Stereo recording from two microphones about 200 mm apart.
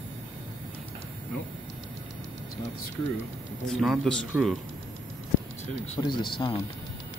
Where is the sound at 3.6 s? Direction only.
Centre (ahead or behind).